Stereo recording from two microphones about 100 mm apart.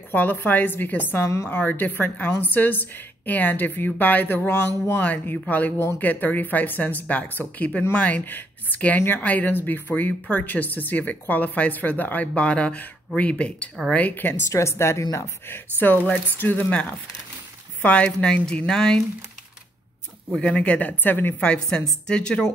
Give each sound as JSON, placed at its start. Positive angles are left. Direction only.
{"t": 0.1, "sound": "a woman's voice", "side_deg": 20}
{"t": 1.6, "sound": "a woman's voice", "side_deg": 20}
{"t": 20.2, "sound": "speech", "side_deg": 10}